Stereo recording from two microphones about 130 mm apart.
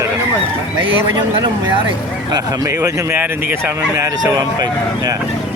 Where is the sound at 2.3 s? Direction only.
30° right (ahead or behind).